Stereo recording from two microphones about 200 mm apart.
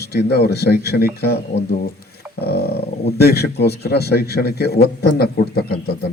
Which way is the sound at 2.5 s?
50° left (ahead or behind).